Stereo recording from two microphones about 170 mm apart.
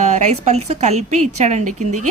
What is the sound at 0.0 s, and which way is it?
Speech, 45° right (ahead or behind).